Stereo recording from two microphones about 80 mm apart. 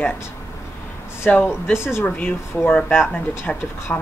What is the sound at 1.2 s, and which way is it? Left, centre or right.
Speech, left.